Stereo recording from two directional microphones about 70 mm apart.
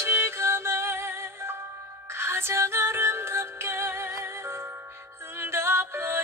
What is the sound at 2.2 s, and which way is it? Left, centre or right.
Music, right.